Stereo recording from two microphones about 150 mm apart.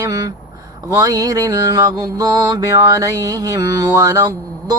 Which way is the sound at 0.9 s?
25° right (ahead or behind).